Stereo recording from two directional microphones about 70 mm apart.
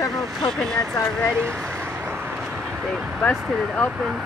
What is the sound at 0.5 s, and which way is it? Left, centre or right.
Speech, centre.